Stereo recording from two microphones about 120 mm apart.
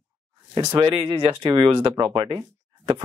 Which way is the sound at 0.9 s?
40° right (ahead or behind).